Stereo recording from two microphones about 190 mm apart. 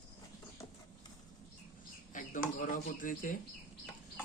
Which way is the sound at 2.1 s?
45° left (ahead or behind).